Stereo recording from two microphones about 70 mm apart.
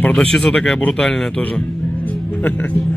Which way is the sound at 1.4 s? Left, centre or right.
Left.